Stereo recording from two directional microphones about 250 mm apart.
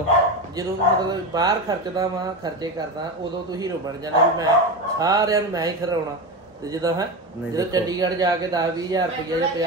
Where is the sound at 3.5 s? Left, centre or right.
Centre.